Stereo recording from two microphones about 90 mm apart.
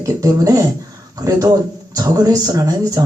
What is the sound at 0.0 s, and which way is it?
Speech, 40° right (ahead or behind).